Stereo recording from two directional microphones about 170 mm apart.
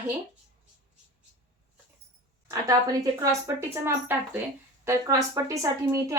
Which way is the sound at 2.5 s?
20° right (ahead or behind).